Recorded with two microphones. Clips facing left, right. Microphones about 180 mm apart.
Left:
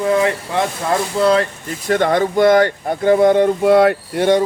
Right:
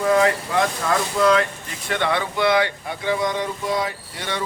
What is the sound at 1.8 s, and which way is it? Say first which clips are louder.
Speech: left 8 dB; 40° left (ahead or behind).